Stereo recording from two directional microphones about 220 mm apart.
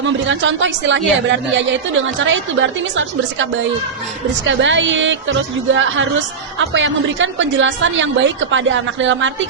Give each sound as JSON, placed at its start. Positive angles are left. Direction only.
{"t": 0.0, "sound": "a woman's voice", "side_deg": -60}